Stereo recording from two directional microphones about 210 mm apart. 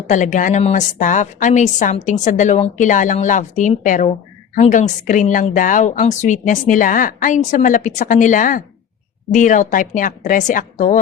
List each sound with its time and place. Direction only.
0.1 s a woman's voice: 35° left (ahead or behind)